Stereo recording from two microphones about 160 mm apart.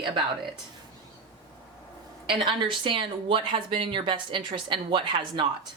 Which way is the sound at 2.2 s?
30° right (ahead or behind).